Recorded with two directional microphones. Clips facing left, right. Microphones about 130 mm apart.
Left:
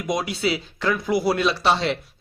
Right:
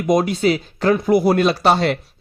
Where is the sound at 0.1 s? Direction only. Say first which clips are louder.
Right 8 dB; 45° right (ahead or behind).